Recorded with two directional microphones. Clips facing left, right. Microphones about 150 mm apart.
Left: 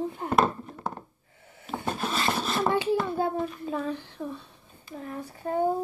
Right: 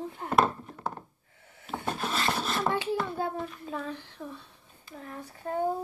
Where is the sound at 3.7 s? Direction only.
30° left (ahead or behind).